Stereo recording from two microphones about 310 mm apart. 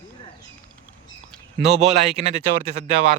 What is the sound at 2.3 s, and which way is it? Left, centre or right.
Speech, right.